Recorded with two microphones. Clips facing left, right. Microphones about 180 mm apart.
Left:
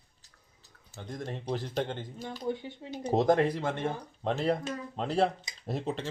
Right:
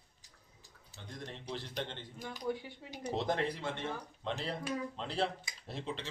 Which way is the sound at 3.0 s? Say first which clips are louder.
Left 9 dB; 45° left (ahead or behind).